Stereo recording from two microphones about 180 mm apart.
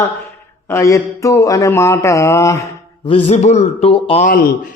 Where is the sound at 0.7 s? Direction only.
15° left (ahead or behind).